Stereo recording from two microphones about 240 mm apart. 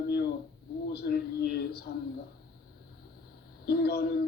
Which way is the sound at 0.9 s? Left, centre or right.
Left.